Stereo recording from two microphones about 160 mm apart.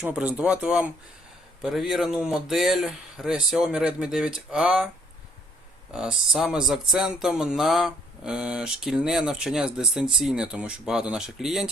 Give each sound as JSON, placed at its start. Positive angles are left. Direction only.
{"t": 0.0, "sound": "speech", "side_deg": -10}
{"t": 5.9, "sound": "speech", "side_deg": -5}